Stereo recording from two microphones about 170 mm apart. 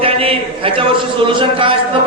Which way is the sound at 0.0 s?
35° right (ahead or behind).